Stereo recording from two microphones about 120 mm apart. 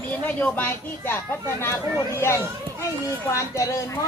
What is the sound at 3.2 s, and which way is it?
Speech, 25° left (ahead or behind).